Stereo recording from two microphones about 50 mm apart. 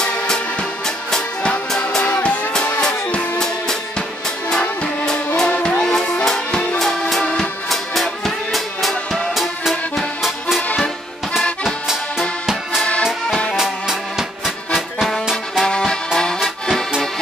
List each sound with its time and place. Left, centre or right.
0.8 s music: centre
4.5 s music: centre
11.6 s accordion: centre
13.3 s music: centre
13.6 s music: centre
15.6 s music: centre